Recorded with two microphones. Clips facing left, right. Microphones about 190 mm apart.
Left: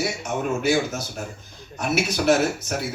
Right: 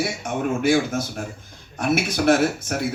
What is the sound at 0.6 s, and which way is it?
Speech, 50° right (ahead or behind).